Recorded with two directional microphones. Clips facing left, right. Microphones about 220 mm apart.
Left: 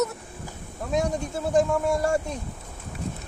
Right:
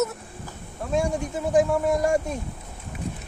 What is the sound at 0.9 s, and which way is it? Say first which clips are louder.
Speech: right 1 dB; 10° right (ahead or behind).